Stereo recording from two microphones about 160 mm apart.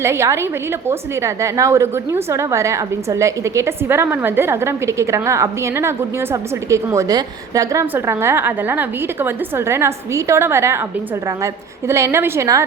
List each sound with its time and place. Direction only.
0.0 s a woman's voice: 15° right (ahead or behind)